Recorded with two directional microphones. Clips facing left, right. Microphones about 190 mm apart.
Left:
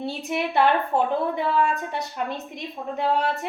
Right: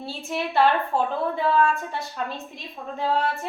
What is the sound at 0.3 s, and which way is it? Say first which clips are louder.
A woman's voice: even; 20° left (ahead or behind).